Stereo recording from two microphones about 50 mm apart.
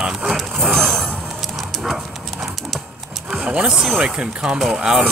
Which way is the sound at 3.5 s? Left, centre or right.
Centre.